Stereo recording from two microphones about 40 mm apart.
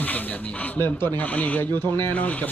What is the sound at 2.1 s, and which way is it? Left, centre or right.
Speech, left.